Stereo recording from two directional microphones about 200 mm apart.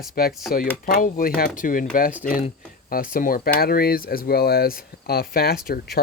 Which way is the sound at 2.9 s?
45° left (ahead or behind).